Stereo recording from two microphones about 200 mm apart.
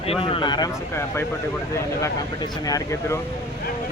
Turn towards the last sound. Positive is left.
turn(degrees=15)  # may be behind; listen again after turning